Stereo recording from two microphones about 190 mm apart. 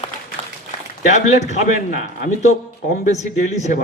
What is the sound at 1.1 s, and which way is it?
A man's voice, 40° left (ahead or behind).